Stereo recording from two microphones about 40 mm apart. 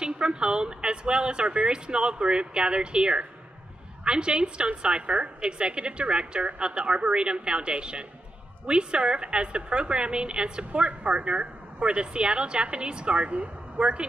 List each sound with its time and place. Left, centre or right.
0.0 s a woman's voice: right